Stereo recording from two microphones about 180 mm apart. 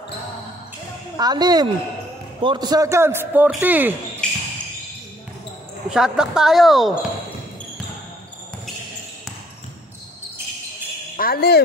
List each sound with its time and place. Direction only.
1.1 s a man's voice: 20° right (ahead or behind)
4.2 s basketball bounce: 5° left (ahead or behind)
5.9 s speech: 5° right (ahead or behind)
11.1 s speech: 55° left (ahead or behind)